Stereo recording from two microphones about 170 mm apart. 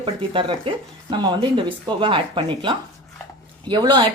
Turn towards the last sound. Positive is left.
turn(degrees=-25)  # may be behind; listen again after turning